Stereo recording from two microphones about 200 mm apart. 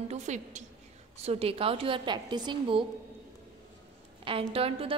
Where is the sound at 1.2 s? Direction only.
30° right (ahead or behind).